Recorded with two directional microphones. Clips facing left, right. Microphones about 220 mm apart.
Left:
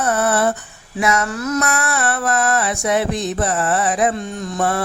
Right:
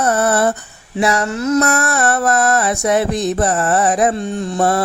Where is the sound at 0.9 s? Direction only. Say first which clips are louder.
Right 3 dB; 35° right (ahead or behind).